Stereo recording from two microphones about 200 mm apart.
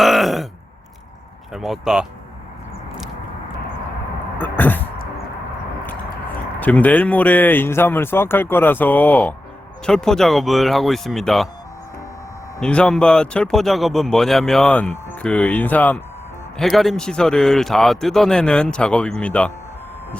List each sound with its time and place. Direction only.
0.0 s groan: centre (ahead or behind)
1.5 s speech: centre (ahead or behind)
4.4 s cough: 10° left (ahead or behind)
6.6 s speech: 10° left (ahead or behind)
12.5 s speech: 5° left (ahead or behind)